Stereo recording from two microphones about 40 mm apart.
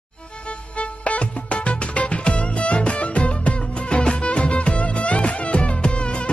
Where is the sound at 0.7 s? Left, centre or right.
Left.